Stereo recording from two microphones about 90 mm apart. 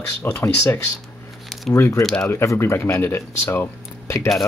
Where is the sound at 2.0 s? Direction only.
5° left (ahead or behind).